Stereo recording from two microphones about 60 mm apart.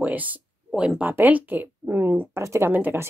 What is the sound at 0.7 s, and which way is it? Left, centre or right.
Speech, centre.